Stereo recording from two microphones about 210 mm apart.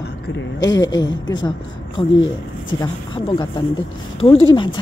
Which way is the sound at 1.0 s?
20° left (ahead or behind).